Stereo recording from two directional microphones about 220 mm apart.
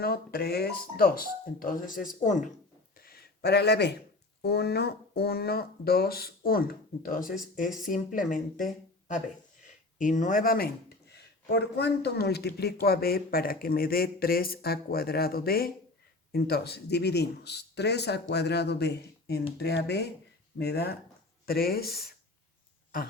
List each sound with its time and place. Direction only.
0.0 s speech: 45° left (ahead or behind)
3.0 s a sound: 45° left (ahead or behind)
4.4 s speech: 45° left (ahead or behind)